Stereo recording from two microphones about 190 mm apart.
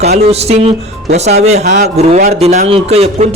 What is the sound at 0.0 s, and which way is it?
A man's voice, 35° right (ahead or behind).